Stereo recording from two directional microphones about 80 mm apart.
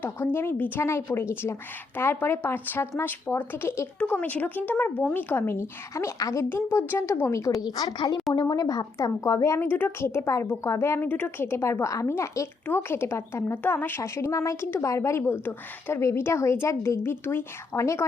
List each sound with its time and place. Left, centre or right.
0.3 s a woman's voice: left
6.5 s a woman's voice: left
7.9 s a woman's voice: left
8.3 s speech: left
9.6 s a woman's voice: left